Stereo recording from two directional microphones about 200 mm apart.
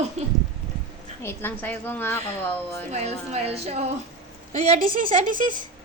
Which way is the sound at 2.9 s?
30° right (ahead or behind).